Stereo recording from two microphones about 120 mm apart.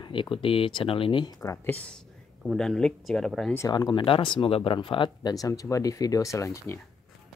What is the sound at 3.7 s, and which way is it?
Speech, 35° left (ahead or behind).